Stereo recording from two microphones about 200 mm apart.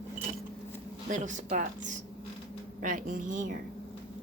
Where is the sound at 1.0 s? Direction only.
40° right (ahead or behind).